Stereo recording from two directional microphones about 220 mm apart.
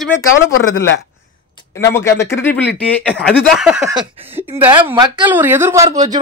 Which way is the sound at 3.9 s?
20° right (ahead or behind).